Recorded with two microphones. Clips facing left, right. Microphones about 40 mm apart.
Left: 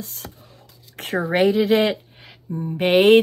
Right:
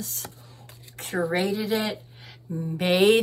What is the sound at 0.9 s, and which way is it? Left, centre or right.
Speech, left.